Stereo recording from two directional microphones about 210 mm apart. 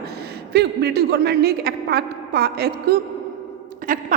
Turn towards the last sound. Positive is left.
turn(degrees=-40)  # may be behind; listen again after turning